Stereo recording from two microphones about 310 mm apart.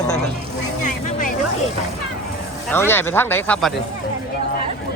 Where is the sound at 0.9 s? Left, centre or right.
Left.